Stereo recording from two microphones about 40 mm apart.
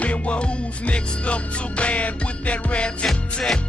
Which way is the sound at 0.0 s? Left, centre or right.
Left.